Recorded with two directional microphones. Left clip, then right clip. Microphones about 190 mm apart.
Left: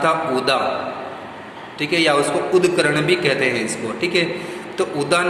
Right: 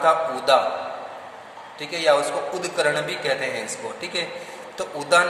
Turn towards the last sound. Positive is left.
turn(degrees=-25)  # may be behind; listen again after turning